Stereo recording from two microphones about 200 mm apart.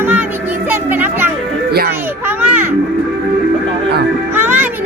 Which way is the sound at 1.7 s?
50° right (ahead or behind).